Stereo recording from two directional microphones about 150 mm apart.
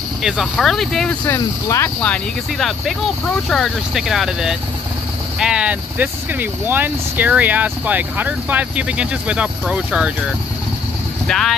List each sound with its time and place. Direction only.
0.2 s speech: centre (ahead or behind)
1.2 s speech: 15° left (ahead or behind)
3.4 s speech: centre (ahead or behind)
11.2 s speech: 5° left (ahead or behind)